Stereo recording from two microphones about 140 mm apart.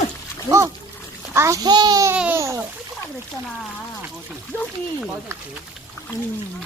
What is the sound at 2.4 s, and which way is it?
Speech, 20° right (ahead or behind).